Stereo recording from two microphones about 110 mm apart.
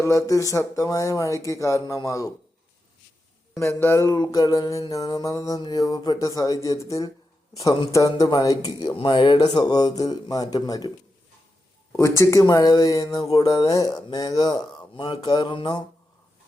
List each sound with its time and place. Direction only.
0.0 s speech: 30° left (ahead or behind)
3.5 s mantra: 25° left (ahead or behind)
9.0 s mantra: 50° left (ahead or behind)
11.9 s mantra: 25° left (ahead or behind); by 15.8 s 45° left (ahead or behind)